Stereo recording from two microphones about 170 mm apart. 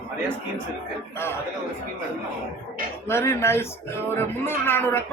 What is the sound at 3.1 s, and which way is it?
A man's voice, 15° left (ahead or behind).